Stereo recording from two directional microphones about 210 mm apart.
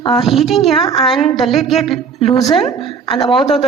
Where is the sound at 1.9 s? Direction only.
25° left (ahead or behind).